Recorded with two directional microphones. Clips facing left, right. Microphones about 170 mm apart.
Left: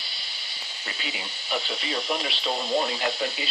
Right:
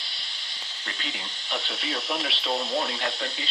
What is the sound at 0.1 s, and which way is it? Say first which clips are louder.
Speech: left 1 dB; 5° left (ahead or behind).